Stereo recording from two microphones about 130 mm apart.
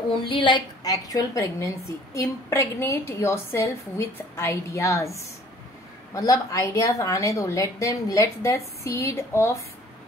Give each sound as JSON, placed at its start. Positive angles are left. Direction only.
{"t": 0.3, "sound": "a woman's voice", "side_deg": 40}